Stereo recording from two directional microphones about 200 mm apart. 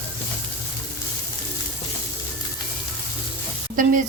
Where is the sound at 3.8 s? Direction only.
40° right (ahead or behind).